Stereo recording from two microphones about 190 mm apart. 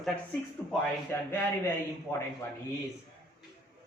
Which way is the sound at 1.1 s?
10° left (ahead or behind).